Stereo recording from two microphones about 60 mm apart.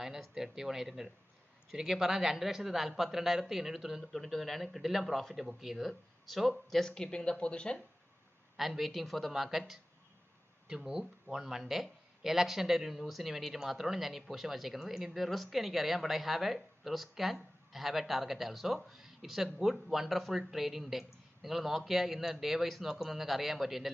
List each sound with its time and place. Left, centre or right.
0.0 s speech: centre
4.0 s speech: centre
8.5 s speech: centre